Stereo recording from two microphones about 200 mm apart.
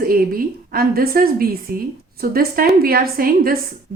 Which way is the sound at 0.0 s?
45° right (ahead or behind).